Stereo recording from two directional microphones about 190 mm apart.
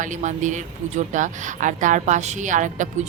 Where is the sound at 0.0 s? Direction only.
40° right (ahead or behind).